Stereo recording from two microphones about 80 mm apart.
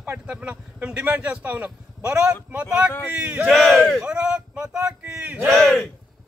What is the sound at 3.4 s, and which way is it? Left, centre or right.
Speech, centre.